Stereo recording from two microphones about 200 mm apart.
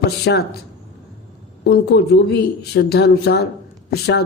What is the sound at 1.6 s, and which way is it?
Speech, 55° left (ahead or behind).